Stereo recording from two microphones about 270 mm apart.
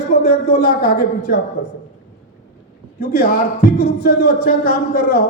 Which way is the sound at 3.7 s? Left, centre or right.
Left.